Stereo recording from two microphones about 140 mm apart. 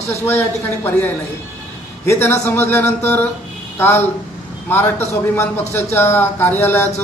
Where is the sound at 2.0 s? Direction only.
20° left (ahead or behind).